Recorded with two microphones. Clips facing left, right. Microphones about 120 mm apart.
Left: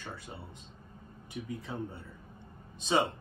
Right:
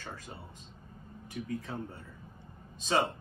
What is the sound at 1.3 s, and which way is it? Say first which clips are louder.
Speech: right 2 dB; 15° left (ahead or behind).